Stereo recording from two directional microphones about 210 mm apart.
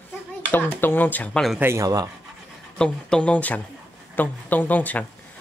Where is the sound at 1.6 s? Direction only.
15° right (ahead or behind).